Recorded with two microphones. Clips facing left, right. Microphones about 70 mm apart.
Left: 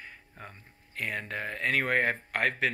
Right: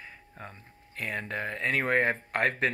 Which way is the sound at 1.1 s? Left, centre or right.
Right.